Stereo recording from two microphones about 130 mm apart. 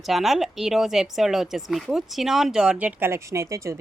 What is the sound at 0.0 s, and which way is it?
A woman's voice, centre (ahead or behind).